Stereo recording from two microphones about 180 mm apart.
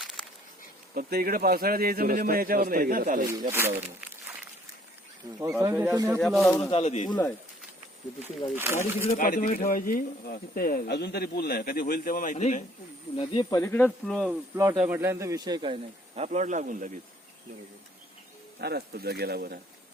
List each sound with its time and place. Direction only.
0.0 s a sound: centre (ahead or behind)
0.9 s a man's voice: 55° right (ahead or behind)
3.5 s speech: 10° right (ahead or behind)
5.5 s a man's voice: 10° right (ahead or behind)
6.1 s speech: 5° left (ahead or behind)
6.7 s speech: 35° left (ahead or behind)
8.5 s speech: 15° right (ahead or behind)
9.1 s speech: 50° left (ahead or behind)
13.1 s speech: 25° left (ahead or behind)
14.1 s speech: centre (ahead or behind)
14.5 s a man's voice: 15° right (ahead or behind); by 17.0 s 45° right (ahead or behind)
18.6 s a man's voice: 60° right (ahead or behind)